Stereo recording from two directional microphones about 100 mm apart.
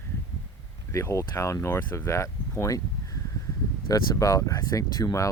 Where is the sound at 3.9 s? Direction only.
35° left (ahead or behind).